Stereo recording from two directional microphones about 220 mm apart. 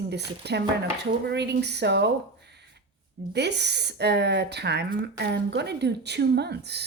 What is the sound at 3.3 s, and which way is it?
Speech, 50° right (ahead or behind).